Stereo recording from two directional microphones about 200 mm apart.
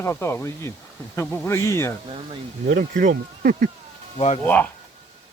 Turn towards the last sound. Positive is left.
turn(degrees=10)  # may be behind; listen again after turning